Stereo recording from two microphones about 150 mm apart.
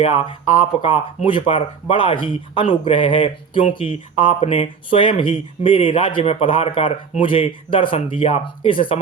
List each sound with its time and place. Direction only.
0.8 s speech: 35° left (ahead or behind)